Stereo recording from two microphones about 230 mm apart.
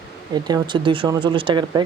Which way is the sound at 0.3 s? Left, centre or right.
Centre.